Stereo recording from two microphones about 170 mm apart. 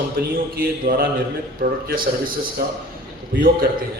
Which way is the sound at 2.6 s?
65° right (ahead or behind).